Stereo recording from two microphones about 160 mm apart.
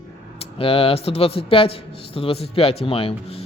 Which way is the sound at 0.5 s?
35° left (ahead or behind).